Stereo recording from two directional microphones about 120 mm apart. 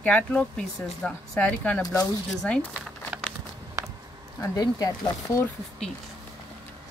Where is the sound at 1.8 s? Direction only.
30° left (ahead or behind).